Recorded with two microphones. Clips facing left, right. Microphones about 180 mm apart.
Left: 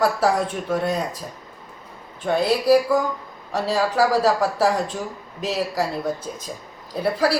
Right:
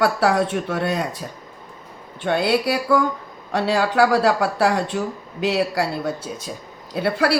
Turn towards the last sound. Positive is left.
turn(degrees=-80)